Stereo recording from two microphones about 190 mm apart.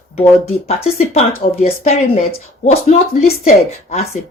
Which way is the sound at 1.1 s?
35° left (ahead or behind).